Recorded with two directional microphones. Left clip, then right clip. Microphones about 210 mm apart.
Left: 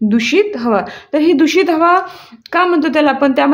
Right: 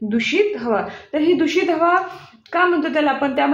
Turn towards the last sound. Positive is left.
turn(degrees=50)  # may be behind; listen again after turning